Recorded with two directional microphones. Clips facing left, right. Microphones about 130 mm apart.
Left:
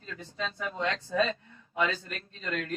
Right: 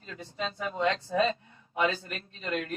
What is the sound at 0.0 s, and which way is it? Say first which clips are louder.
Speech: right 1 dB; 20° right (ahead or behind).